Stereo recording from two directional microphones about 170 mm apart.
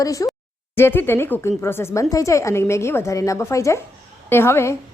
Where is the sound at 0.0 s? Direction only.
20° left (ahead or behind).